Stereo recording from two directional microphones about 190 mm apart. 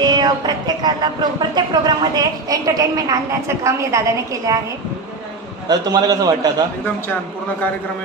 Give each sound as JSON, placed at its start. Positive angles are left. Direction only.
{"t": 0.0, "sound": "a woman's voice", "side_deg": -20}
{"t": 5.7, "sound": "a woman's voice", "side_deg": -20}